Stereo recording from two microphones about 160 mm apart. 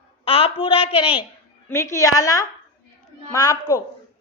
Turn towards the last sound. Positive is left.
turn(degrees=20)  # may be behind; listen again after turning